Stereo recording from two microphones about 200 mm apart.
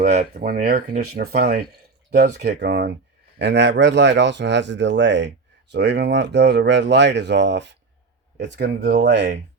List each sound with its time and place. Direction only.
0.0 s speech: 35° right (ahead or behind); by 9.4 s 60° right (ahead or behind)